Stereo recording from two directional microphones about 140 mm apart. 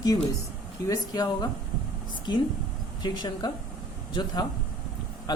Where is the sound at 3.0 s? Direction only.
30° left (ahead or behind).